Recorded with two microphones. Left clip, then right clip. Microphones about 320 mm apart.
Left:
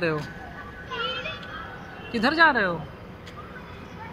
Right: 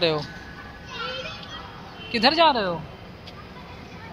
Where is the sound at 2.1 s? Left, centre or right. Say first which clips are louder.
Right 4 dB; centre.